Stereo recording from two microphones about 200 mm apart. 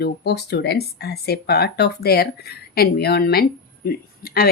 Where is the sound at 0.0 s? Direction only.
55° left (ahead or behind).